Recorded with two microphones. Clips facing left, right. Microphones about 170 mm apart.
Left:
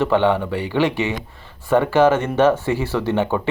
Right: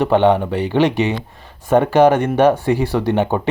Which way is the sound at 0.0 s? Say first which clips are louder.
Right 3 dB; 20° right (ahead or behind).